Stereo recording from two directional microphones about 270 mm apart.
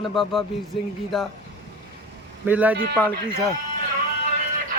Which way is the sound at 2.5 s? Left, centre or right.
Centre.